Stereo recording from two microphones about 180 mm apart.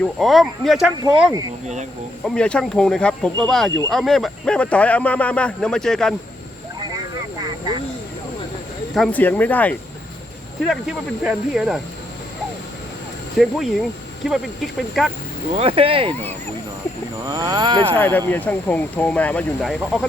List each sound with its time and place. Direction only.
0.2 s speech: centre (ahead or behind)
1.3 s speech: 20° right (ahead or behind)
2.2 s speech: 5° left (ahead or behind)
6.9 s vehicle: 20° right (ahead or behind)
9.0 s speech: 10° left (ahead or behind)
10.7 s speech: 5° right (ahead or behind)
13.4 s speech: centre (ahead or behind)
15.5 s speech: 30° right (ahead or behind)
17.2 s speech: 20° right (ahead or behind)
17.9 s speech: 10° left (ahead or behind)